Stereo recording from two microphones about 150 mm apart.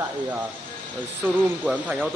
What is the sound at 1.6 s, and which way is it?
Speech, 5° right (ahead or behind).